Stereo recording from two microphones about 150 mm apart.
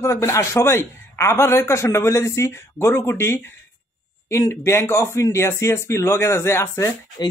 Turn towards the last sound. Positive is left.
turn(degrees=30)  # may be behind; listen again after turning